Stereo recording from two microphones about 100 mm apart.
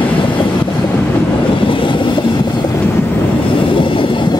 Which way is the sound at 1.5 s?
60° left (ahead or behind).